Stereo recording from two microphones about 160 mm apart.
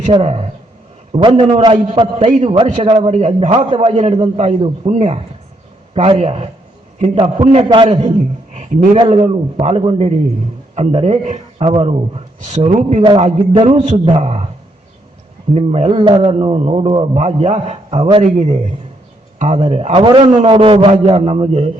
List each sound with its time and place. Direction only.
0.2 s a man's voice: 40° right (ahead or behind)
8.5 s a man's voice: 50° right (ahead or behind)
9.0 s a man's voice: 40° right (ahead or behind)
13.5 s a man's voice: 35° right (ahead or behind)
15.5 s a man's voice: 40° right (ahead or behind)